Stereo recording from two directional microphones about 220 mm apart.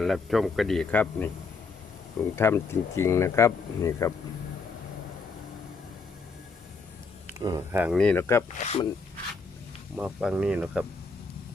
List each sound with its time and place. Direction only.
0.0 s speech: centre (ahead or behind)
2.3 s speech: 10° left (ahead or behind)
7.3 s speech: 15° right (ahead or behind)
7.9 s speech: 5° left (ahead or behind)
8.5 s speech: 30° left (ahead or behind)
10.0 s speech: 5° right (ahead or behind)